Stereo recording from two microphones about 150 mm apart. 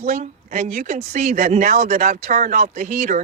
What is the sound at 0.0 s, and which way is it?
A woman's voice, 55° right (ahead or behind).